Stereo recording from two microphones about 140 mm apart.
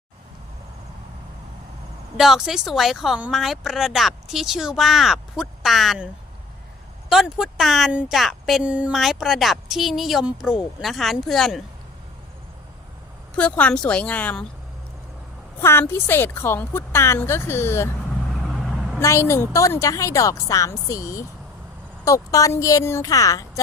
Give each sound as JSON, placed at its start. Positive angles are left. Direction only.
{"t": 2.1, "sound": "speech", "side_deg": -5}
{"t": 7.1, "sound": "speech", "side_deg": -5}
{"t": 13.3, "sound": "a woman's voice", "side_deg": 10}
{"t": 15.6, "sound": "a woman's voice", "side_deg": 15}
{"t": 18.3, "sound": "vehicle", "side_deg": 0}
{"t": 18.9, "sound": "a woman's voice", "side_deg": 20}